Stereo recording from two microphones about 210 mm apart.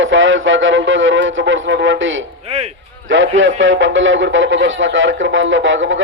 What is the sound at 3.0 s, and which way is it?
A man's voice, 65° right (ahead or behind).